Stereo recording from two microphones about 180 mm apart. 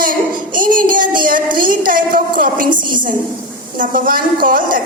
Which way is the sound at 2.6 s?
25° right (ahead or behind).